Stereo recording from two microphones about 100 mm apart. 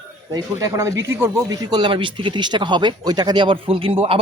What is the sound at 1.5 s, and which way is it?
Speech, 45° right (ahead or behind).